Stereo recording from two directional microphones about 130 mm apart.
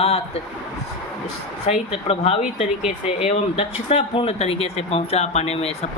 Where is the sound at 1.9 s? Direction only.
50° left (ahead or behind).